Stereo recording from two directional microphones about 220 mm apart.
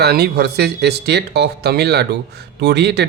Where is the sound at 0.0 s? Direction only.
45° right (ahead or behind).